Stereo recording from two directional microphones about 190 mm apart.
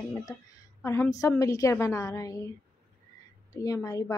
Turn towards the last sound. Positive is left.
turn(degrees=15)  # may be behind; listen again after turning